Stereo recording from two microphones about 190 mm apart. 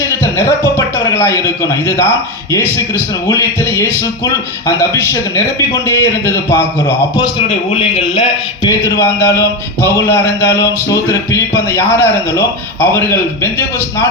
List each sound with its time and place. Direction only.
0.2 s a sound: 15° left (ahead or behind)
2.5 s a man's voice: 15° left (ahead or behind)
7.7 s a man's voice: 30° left (ahead or behind); by 13.0 s 10° left (ahead or behind)